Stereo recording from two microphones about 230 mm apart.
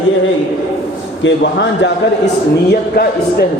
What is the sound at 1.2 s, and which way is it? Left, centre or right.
A man's voice, left.